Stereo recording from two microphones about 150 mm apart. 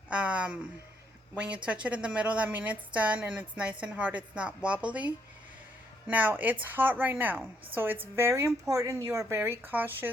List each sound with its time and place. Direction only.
0.1 s a woman's voice: 10° right (ahead or behind)